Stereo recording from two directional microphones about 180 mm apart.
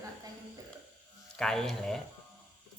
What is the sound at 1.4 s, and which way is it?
Speech, 5° left (ahead or behind).